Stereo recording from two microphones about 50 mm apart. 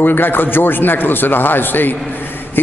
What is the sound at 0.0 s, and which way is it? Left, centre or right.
A man's voice, left.